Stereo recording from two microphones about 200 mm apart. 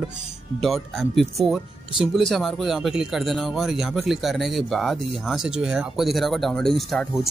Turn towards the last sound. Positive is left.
turn(degrees=0)  # may be behind; listen again after turning